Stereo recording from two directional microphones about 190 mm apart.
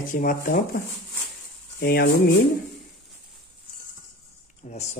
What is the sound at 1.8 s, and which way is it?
Speech, 55° left (ahead or behind).